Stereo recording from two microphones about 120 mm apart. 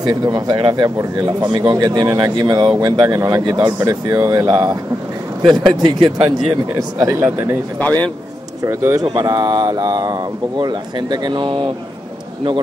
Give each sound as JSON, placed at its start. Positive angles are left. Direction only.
{"t": 0.0, "sound": "speech", "side_deg": -35}
{"t": 3.4, "sound": "speech", "side_deg": -40}
{"t": 3.8, "sound": "speech", "side_deg": -25}
{"t": 7.2, "sound": "speech", "side_deg": -15}
{"t": 7.8, "sound": "a man's voice", "side_deg": 15}
{"t": 8.6, "sound": "speech", "side_deg": -20}